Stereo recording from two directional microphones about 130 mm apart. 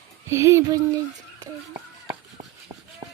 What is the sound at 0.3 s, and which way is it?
Speech, 20° right (ahead or behind).